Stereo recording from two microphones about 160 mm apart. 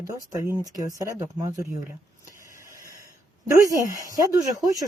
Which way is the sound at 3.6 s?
20° left (ahead or behind).